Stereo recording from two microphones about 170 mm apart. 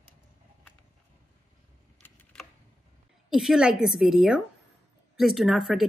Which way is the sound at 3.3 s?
5° right (ahead or behind).